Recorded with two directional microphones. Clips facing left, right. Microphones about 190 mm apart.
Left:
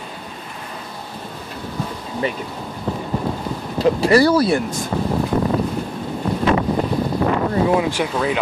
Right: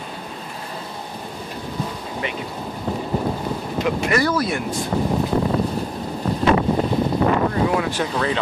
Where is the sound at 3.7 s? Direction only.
35° left (ahead or behind).